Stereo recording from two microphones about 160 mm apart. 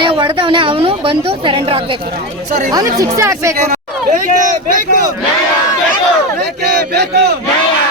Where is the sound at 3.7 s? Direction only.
50° right (ahead or behind).